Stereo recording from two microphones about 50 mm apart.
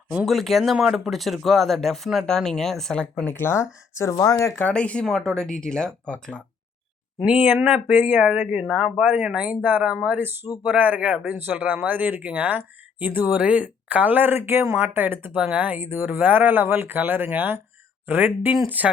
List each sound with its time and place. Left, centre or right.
0.3 s speech: centre
3.3 s speech: left
4.6 s speech: left
5.0 s speech: centre
6.1 s speech: left
7.3 s speech: right
9.8 s speech: right
10.2 s speech: right
10.6 s speech: right
13.4 s speech: right
15.3 s speech: right